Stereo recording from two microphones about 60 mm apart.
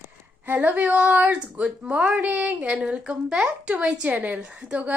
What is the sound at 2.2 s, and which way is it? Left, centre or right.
Speech, right.